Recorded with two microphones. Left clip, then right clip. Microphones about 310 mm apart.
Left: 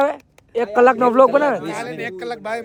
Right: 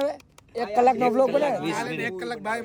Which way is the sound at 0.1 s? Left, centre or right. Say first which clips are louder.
Left 8 dB; left.